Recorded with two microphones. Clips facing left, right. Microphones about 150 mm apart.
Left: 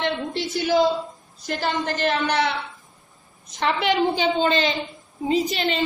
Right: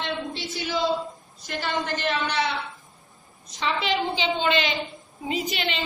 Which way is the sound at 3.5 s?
60° left (ahead or behind).